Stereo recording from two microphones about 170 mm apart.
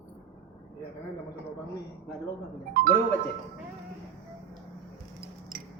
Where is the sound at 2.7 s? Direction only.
60° right (ahead or behind).